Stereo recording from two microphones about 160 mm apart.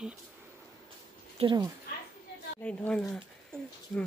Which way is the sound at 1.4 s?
40° right (ahead or behind).